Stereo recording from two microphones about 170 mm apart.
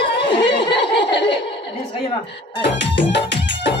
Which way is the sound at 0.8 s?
90° left.